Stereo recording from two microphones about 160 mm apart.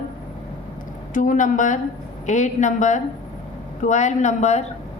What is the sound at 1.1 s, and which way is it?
A woman's voice, 55° left (ahead or behind).